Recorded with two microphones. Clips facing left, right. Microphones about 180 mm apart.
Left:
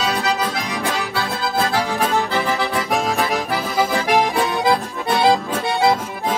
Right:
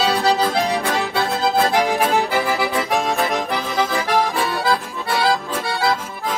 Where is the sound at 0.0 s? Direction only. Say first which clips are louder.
Right 3 dB; 30° right (ahead or behind); by 2.7 s 10° right (ahead or behind).